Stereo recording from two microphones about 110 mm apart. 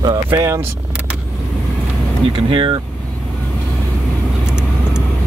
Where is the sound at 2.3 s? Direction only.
45° right (ahead or behind).